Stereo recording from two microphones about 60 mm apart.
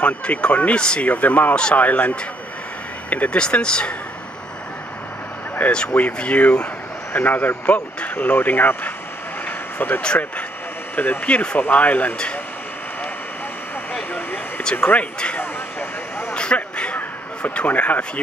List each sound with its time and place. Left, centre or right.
0.0 s speech: left
1.1 s speech: left
3.4 s speech: centre
5.6 s speech: centre
10.0 s speech: left
14.6 s speech: centre
15.3 s vehicle: left
16.3 s a sound: centre